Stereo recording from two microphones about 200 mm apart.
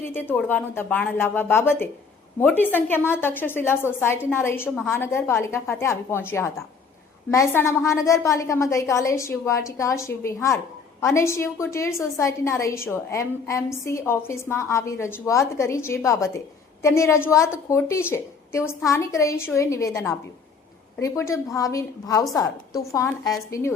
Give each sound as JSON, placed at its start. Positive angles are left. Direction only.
{"t": 0.0, "sound": "a woman's voice", "side_deg": 10}